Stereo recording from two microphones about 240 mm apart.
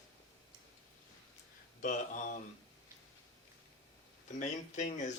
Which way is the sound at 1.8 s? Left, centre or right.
Left.